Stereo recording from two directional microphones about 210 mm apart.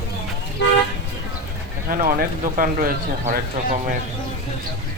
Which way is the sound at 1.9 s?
45° right (ahead or behind).